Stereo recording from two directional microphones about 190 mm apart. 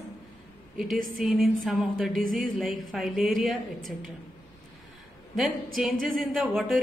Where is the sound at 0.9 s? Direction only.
50° right (ahead or behind).